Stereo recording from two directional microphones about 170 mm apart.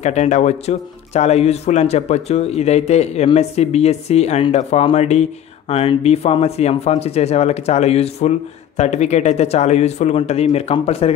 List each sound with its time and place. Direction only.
0.0 s speech: 40° left (ahead or behind)